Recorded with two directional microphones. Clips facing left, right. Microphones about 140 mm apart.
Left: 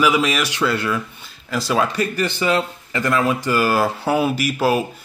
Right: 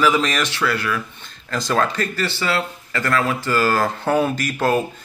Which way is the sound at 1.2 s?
5° left (ahead or behind).